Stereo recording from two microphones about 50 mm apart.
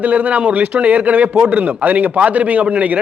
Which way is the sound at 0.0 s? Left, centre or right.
Right.